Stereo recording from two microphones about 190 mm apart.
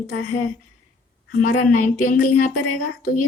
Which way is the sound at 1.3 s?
45° left (ahead or behind).